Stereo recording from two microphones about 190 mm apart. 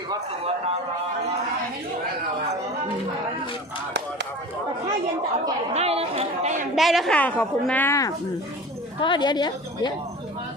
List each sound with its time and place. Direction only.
0.1 s a man's voice: 30° right (ahead or behind)
5.7 s a sound: 30° right (ahead or behind)
6.7 s a woman's voice: centre (ahead or behind); by 9.9 s 20° left (ahead or behind)